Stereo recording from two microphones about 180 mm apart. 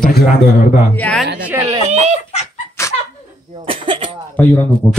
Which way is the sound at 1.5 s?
15° right (ahead or behind).